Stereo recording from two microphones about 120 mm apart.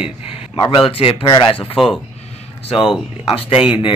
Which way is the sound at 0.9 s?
50° left (ahead or behind).